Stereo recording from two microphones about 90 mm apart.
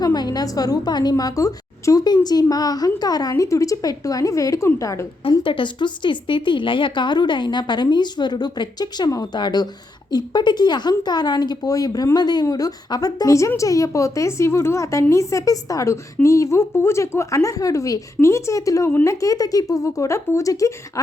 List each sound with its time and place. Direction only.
0.0 s a woman's voice: 45° left (ahead or behind)
5.4 s a woman's voice: 65° left (ahead or behind); by 21.0 s 40° left (ahead or behind)